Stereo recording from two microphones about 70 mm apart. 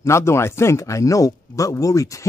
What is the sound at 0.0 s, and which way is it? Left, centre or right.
Speech, left.